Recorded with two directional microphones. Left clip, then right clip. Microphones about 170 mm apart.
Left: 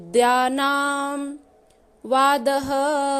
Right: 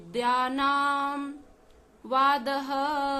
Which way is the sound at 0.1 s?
50° left (ahead or behind).